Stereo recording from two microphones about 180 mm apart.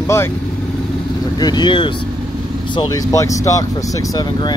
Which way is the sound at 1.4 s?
25° left (ahead or behind).